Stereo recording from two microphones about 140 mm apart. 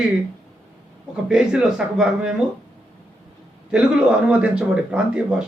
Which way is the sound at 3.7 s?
5° right (ahead or behind).